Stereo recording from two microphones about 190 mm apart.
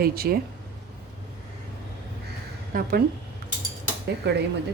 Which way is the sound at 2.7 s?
50° right (ahead or behind).